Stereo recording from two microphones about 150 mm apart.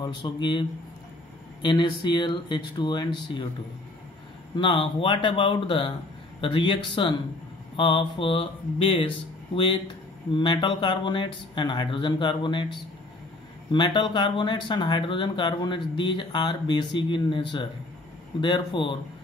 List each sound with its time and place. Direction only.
0.0 s speech: 30° left (ahead or behind)
4.6 s speech: 35° left (ahead or behind)
10.3 s speech: 30° left (ahead or behind)
13.7 s speech: 30° left (ahead or behind)